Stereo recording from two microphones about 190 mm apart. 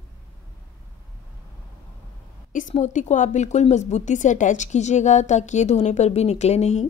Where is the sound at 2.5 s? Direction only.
40° left (ahead or behind).